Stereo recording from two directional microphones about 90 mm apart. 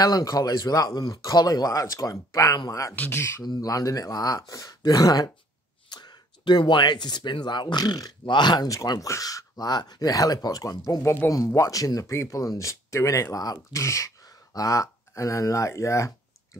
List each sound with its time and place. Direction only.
0.0 s speech: 45° left (ahead or behind); by 3.4 s 30° left (ahead or behind)
3.4 s speech: 40° left (ahead or behind)
8.6 s speech: 45° left (ahead or behind)